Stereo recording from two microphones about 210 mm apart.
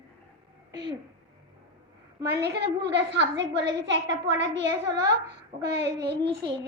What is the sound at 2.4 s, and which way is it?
A woman's voice, 55° right (ahead or behind).